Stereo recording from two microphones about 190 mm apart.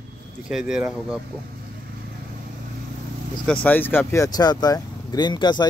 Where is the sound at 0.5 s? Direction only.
5° right (ahead or behind).